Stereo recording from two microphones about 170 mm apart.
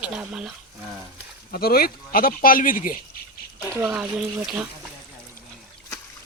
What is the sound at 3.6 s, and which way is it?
Speech, 5° right (ahead or behind).